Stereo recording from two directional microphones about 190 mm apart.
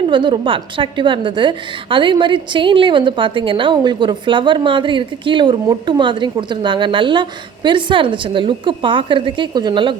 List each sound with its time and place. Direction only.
0.1 s a woman's voice: 25° right (ahead or behind)